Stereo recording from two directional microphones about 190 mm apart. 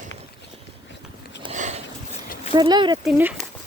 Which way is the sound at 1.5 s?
40° right (ahead or behind).